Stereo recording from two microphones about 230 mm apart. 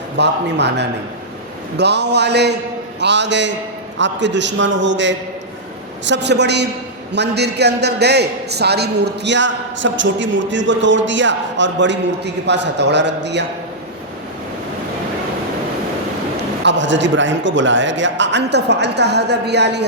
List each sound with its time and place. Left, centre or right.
0.2 s a man's voice: right
16.6 s a man's voice: right